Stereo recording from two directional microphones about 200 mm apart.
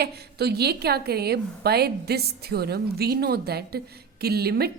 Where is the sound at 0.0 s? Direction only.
55° right (ahead or behind).